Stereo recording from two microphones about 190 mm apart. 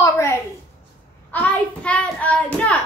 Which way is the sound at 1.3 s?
10° left (ahead or behind).